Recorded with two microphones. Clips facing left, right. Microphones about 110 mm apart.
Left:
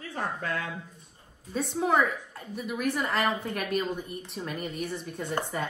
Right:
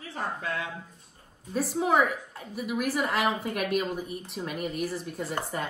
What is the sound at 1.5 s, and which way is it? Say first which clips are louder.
A woman's voice: right 1 dB; centre (ahead or behind).